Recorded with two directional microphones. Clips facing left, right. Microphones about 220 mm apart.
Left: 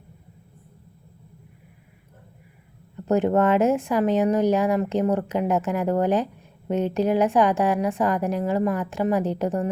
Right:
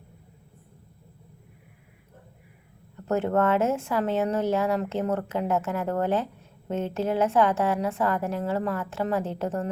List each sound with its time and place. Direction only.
3.1 s speech: 15° left (ahead or behind)